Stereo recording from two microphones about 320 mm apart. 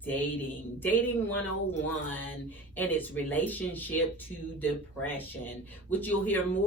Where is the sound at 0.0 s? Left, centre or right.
Centre.